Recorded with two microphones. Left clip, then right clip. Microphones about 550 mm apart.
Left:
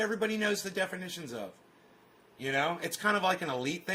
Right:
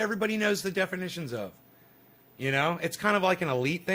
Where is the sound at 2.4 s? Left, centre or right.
Right.